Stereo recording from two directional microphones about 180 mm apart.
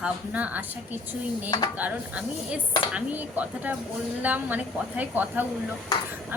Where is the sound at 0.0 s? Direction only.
10° right (ahead or behind).